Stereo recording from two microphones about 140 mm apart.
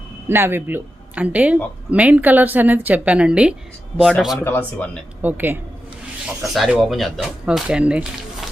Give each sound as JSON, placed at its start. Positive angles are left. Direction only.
{"t": 0.3, "sound": "a woman's voice", "side_deg": -15}
{"t": 4.4, "sound": "speech", "side_deg": 15}
{"t": 5.2, "sound": "a woman's voice", "side_deg": -15}
{"t": 6.4, "sound": "speech", "side_deg": 0}